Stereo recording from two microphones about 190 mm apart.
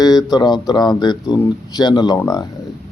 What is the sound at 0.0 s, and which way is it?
Speech, 20° left (ahead or behind).